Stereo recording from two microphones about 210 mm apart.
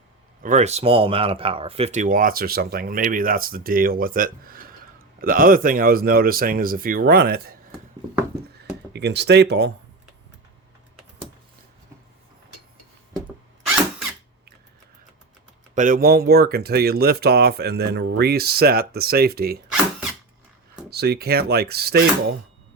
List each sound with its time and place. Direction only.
0.4 s speech: 35° right (ahead or behind)
8.9 s speech: 55° right (ahead or behind)
15.7 s speech: 40° right (ahead or behind)
20.9 s speech: 50° right (ahead or behind)